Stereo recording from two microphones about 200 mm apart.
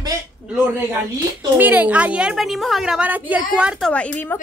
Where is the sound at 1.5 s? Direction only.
10° right (ahead or behind).